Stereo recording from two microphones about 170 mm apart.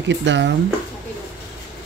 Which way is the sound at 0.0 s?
90° right.